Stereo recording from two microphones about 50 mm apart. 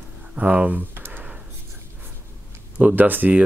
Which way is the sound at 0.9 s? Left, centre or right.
Right.